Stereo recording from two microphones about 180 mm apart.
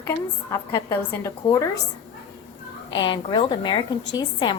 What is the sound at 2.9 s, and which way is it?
A woman's voice, 25° left (ahead or behind).